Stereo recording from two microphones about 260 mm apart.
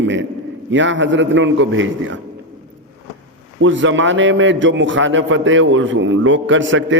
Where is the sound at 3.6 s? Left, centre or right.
Right.